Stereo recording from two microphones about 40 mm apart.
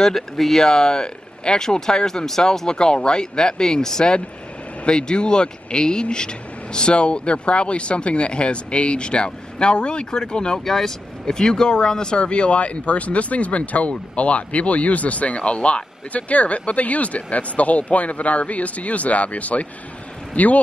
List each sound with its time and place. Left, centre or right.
0.0 s speech: centre
0.7 s speech: centre; by 20.5 s left